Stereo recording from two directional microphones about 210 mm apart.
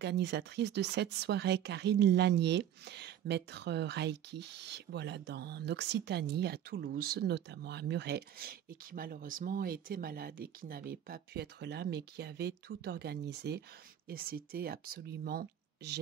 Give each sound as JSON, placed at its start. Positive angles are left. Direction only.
{"t": 0.0, "sound": "speech", "side_deg": -55}